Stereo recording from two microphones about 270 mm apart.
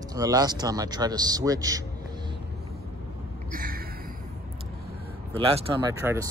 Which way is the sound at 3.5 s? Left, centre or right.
Right.